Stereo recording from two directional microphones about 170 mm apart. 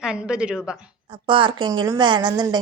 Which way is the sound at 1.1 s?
30° right (ahead or behind).